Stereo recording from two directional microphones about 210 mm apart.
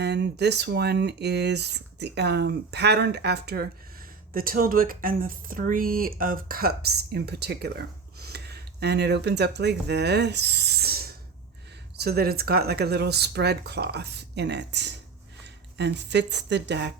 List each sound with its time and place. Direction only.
0.0 s speech: 50° right (ahead or behind)